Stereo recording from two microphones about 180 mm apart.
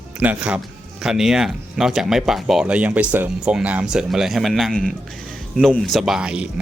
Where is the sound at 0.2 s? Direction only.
5° right (ahead or behind).